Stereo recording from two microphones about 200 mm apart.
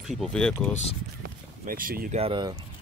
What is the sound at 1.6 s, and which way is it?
Speech, 45° right (ahead or behind).